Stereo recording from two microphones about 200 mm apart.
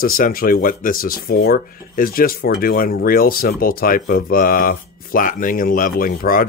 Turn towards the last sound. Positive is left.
turn(degrees=45)  # may be behind; listen again after turning